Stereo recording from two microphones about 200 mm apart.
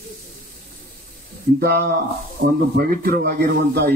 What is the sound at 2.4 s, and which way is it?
Speech, 65° right (ahead or behind).